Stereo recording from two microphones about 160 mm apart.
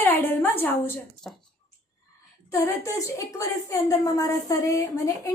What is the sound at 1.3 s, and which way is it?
Speech, centre (ahead or behind).